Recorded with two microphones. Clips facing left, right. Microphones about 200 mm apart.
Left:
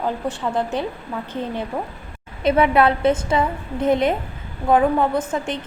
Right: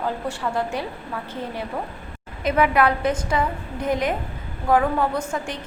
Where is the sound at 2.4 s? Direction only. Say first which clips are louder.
Left 3 dB; 25° left (ahead or behind).